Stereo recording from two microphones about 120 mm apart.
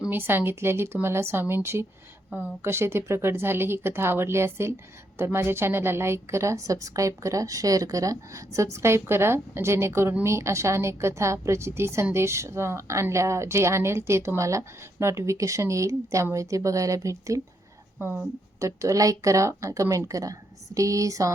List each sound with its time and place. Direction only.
0.1 s speech: 20° right (ahead or behind)
18.6 s speech: 25° right (ahead or behind)